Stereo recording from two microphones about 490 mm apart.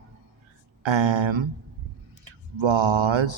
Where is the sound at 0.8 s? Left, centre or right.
Right.